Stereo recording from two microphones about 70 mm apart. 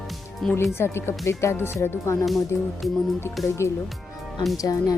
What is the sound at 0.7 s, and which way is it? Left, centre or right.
Speech, left.